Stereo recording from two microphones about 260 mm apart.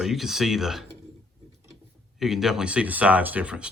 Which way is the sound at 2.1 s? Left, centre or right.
Centre.